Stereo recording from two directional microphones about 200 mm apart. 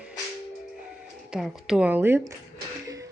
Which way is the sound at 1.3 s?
Centre (ahead or behind).